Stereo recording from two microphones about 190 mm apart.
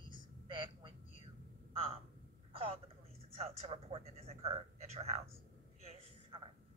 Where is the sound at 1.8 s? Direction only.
30° right (ahead or behind).